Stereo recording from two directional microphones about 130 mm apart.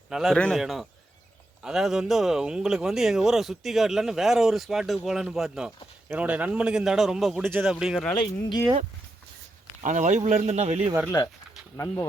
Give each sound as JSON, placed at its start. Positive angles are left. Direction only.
{"t": 0.1, "sound": "a man's voice", "side_deg": 0}
{"t": 7.4, "sound": "speech", "side_deg": -15}
{"t": 8.1, "sound": "speech", "side_deg": 35}
{"t": 9.8, "sound": "speech", "side_deg": -70}